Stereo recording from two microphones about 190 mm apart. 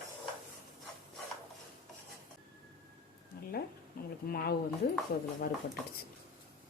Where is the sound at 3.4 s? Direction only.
55° left (ahead or behind).